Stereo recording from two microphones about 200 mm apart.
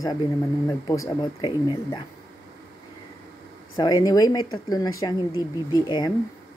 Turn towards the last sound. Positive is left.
turn(degrees=20)  # may be behind; listen again after turning